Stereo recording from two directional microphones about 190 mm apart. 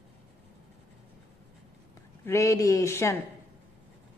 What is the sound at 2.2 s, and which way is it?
Speech, 15° left (ahead or behind).